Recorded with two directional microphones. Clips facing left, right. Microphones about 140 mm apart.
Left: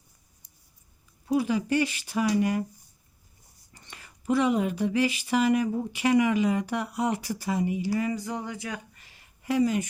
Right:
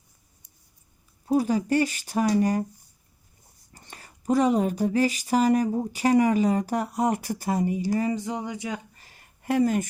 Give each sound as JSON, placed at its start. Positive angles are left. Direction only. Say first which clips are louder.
{"t": 1.3, "sound": "speech", "louder": "right 2 dB", "side_deg": -40}
{"t": 3.8, "sound": "speech", "louder": "right 2 dB", "side_deg": -40}
{"t": 8.1, "sound": "speech", "louder": "right 3 dB", "side_deg": -20}
{"t": 9.0, "sound": "a sound", "louder": "right 3 dB", "side_deg": -45}